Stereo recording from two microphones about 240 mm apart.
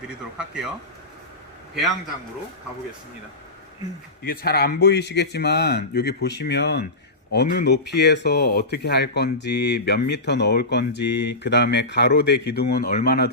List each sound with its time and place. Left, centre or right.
0.3 s speech: centre
4.2 s speech: left